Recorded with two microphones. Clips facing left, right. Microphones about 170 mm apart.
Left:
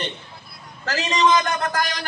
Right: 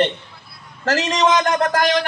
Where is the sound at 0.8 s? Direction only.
85° right.